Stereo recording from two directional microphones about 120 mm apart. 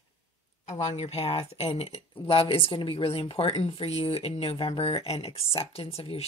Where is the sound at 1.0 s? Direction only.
55° left (ahead or behind).